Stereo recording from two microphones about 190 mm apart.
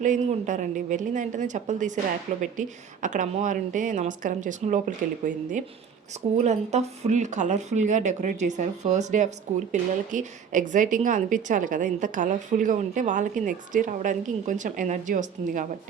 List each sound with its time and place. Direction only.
0.0 s a woman's voice: 40° right (ahead or behind)